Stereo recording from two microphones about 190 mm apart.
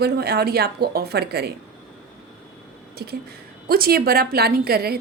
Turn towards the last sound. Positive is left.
turn(degrees=-55)  # may be behind; listen again after turning